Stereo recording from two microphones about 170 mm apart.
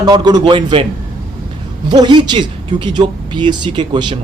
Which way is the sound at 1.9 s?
25° right (ahead or behind).